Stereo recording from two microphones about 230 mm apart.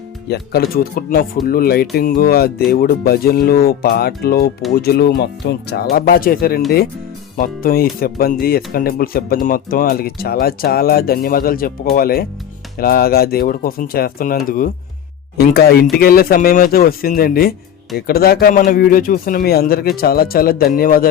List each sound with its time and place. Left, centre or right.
0.3 s speech: left